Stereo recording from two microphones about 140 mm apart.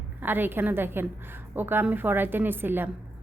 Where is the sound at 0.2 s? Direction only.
15° right (ahead or behind).